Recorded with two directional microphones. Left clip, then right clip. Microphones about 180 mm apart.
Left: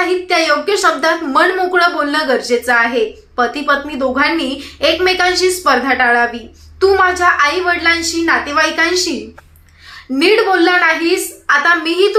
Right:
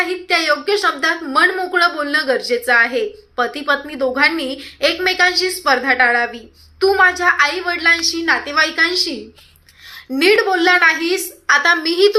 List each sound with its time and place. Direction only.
0.0 s a woman's voice: 10° right (ahead or behind)
10.2 s a woman's voice: 25° right (ahead or behind)